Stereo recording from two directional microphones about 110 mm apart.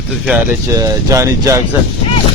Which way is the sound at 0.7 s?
30° right (ahead or behind).